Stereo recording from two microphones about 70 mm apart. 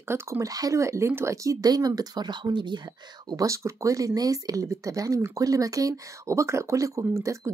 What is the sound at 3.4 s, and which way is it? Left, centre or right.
Speech, right.